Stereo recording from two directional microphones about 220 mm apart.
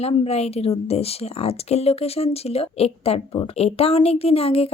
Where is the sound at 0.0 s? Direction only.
30° left (ahead or behind).